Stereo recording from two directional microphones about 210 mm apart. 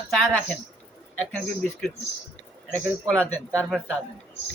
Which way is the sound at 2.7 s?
5° left (ahead or behind).